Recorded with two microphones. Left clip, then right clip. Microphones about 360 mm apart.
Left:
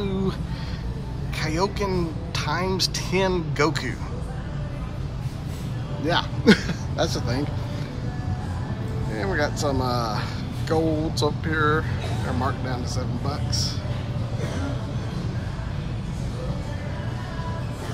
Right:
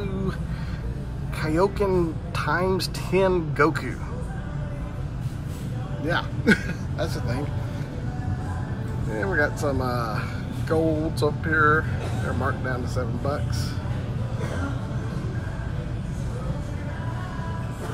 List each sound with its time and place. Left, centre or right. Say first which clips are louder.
1.4 s speech: right 3 dB; centre
6.0 s speech: left 3 dB; centre
9.1 s speech: right 2 dB; centre